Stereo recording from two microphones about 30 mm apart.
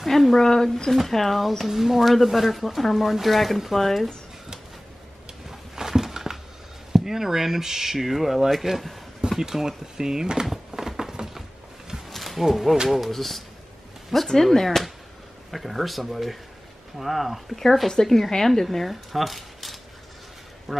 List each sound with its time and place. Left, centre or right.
0.0 s speech: centre
0.4 s speech: centre
1.7 s speech: centre
5.5 s a sound: centre
6.9 s speech: centre
9.4 s speech: centre
10.7 s a sound: centre
12.1 s wild animals: centre
12.4 s speech: centre
13.1 s speech: centre
15.5 s speech: centre
17.8 s speech: centre